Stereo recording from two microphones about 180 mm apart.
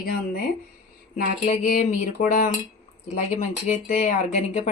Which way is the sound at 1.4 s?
45° left (ahead or behind).